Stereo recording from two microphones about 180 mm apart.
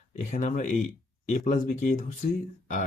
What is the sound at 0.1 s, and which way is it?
Speech, 40° left (ahead or behind).